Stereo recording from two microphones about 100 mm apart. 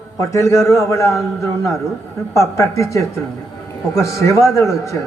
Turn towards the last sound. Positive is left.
turn(degrees=30)  # may be behind; listen again after turning